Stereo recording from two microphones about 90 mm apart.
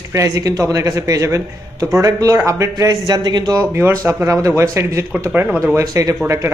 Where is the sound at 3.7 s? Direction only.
30° right (ahead or behind).